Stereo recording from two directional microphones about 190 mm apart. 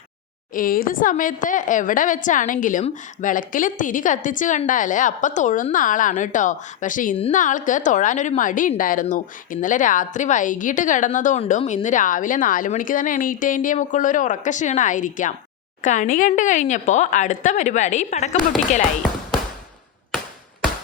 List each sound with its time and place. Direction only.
0.5 s a woman's voice: 50° left (ahead or behind)